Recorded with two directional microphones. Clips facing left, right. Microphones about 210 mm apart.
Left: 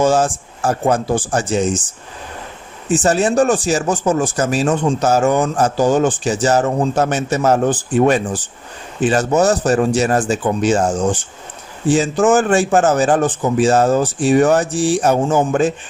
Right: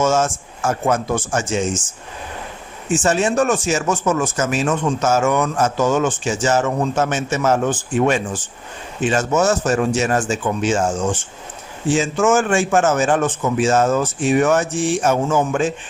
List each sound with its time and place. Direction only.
0.0 s speech: 35° left (ahead or behind)
2.9 s speech: 35° left (ahead or behind)